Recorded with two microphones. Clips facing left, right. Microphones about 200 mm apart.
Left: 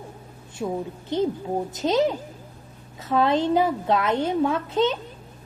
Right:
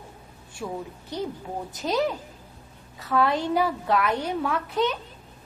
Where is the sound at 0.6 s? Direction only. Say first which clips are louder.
Left 5 dB; 25° left (ahead or behind).